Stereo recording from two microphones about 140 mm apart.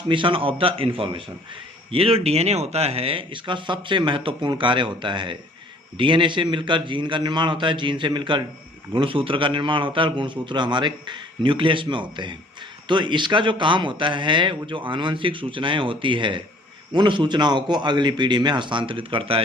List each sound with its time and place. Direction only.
0.1 s a man's voice: 40° right (ahead or behind)